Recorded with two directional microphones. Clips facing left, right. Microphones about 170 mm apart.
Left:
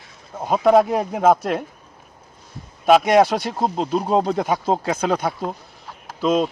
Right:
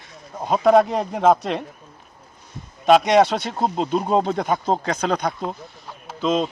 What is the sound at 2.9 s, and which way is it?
Speech, 5° left (ahead or behind).